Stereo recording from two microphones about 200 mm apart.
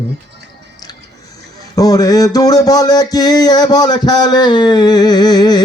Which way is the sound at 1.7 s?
20° left (ahead or behind).